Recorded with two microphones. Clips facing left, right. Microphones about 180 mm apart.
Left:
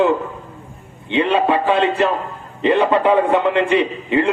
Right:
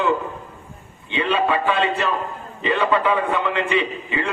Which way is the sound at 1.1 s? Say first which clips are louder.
Left 5 dB; 60° left (ahead or behind).